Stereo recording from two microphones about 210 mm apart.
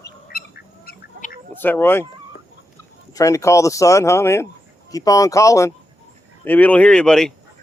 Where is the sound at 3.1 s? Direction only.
15° left (ahead or behind).